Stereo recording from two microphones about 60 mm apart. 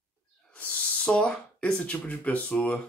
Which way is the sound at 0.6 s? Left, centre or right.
Left.